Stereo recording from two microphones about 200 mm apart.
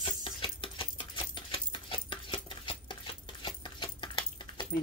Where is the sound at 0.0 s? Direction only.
25° left (ahead or behind).